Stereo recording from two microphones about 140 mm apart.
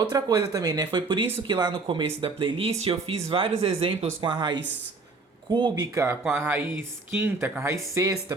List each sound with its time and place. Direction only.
0.0 s speech: 30° right (ahead or behind)
6.2 s speech: 15° right (ahead or behind)